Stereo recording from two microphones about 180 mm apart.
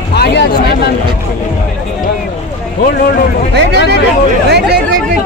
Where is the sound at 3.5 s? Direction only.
70° right (ahead or behind).